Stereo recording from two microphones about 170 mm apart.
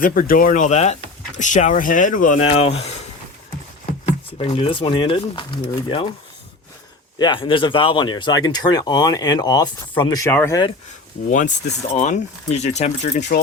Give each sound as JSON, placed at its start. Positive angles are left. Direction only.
{"t": 0.0, "sound": "speech", "side_deg": 55}
{"t": 2.5, "sound": "speech", "side_deg": 35}
{"t": 4.4, "sound": "speech", "side_deg": 35}
{"t": 7.2, "sound": "speech", "side_deg": 30}
{"t": 11.3, "sound": "speech", "side_deg": 50}